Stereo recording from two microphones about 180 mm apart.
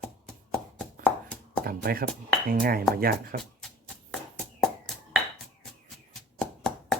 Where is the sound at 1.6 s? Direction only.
55° right (ahead or behind).